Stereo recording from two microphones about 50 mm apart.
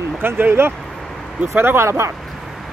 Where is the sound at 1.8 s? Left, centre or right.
Right.